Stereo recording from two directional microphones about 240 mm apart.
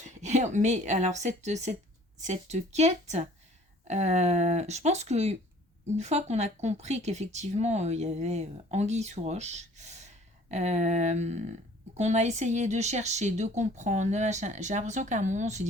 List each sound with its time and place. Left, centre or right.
0.0 s speech: right